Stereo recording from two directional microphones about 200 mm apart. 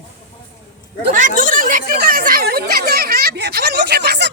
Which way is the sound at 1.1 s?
40° right (ahead or behind).